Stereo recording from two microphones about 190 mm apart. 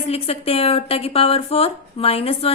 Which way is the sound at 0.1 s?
30° left (ahead or behind).